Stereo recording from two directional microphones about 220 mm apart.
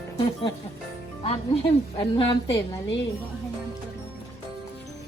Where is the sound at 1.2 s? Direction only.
25° left (ahead or behind).